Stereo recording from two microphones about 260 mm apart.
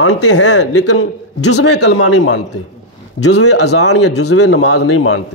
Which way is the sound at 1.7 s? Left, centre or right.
Left.